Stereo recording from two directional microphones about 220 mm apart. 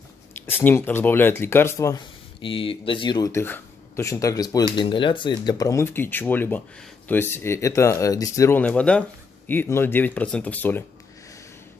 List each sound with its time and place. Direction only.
0.3 s speech: 10° left (ahead or behind)
2.4 s speech: 25° left (ahead or behind); by 10.9 s 10° left (ahead or behind)